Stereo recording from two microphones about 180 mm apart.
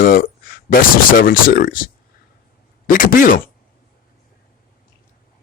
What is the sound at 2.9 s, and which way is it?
Speech, 50° left (ahead or behind).